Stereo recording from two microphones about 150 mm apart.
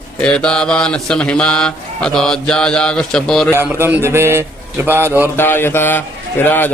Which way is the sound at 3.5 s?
15° right (ahead or behind).